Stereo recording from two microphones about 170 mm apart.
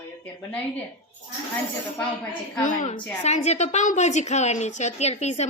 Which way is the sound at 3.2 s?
40° left (ahead or behind).